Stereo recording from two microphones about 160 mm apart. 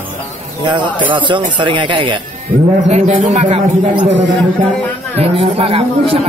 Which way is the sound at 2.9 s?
45° right (ahead or behind).